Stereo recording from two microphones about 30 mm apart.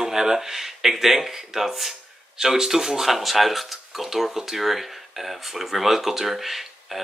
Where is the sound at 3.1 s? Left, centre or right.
Centre.